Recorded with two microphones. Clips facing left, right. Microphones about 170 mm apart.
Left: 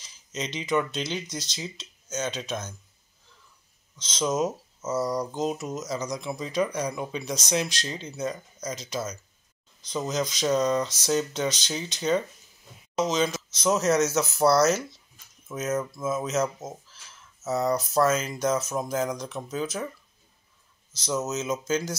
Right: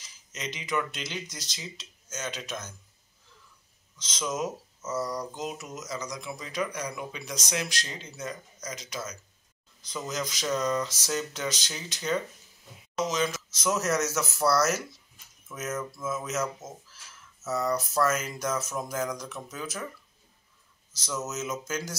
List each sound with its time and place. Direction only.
0.0 s speech: 25° left (ahead or behind)
4.0 s speech: 25° left (ahead or behind)
15.4 s a sound: 20° left (ahead or behind)
16.0 s speech: 20° left (ahead or behind)
21.0 s speech: 20° left (ahead or behind)